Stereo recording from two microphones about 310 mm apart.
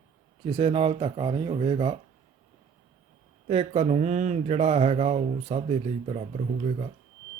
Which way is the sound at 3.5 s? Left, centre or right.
Centre.